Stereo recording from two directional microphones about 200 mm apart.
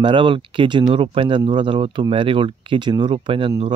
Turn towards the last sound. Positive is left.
turn(degrees=-25)  # may be behind; listen again after turning